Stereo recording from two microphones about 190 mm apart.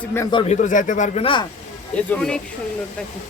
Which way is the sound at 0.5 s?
40° left (ahead or behind).